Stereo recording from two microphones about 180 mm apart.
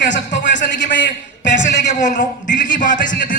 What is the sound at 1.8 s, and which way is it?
A man's voice, 40° left (ahead or behind).